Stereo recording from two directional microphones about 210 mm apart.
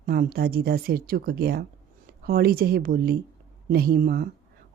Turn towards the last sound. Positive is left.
turn(degrees=-45)  # may be behind; listen again after turning